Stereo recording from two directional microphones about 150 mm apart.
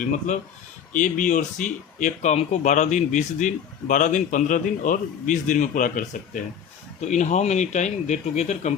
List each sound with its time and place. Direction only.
0.3 s speech: 55° left (ahead or behind)